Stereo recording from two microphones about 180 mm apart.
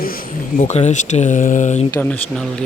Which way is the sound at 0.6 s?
40° left (ahead or behind).